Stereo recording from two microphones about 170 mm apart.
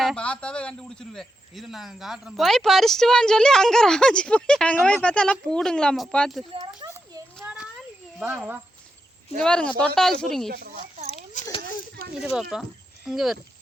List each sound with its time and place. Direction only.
0.0 s a man's voice: 5° left (ahead or behind)
6.4 s speech: 30° right (ahead or behind)
6.8 s a sound: 15° right (ahead or behind)
7.4 s a sound: 5° right (ahead or behind)
8.2 s speech: 5° right (ahead or behind)
9.4 s a man's voice: 5° left (ahead or behind)
10.5 s speech: 65° right (ahead or behind)
12.2 s a man's voice: centre (ahead or behind)